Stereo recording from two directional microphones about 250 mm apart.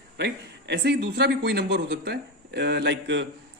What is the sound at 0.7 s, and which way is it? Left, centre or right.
A man's voice, right.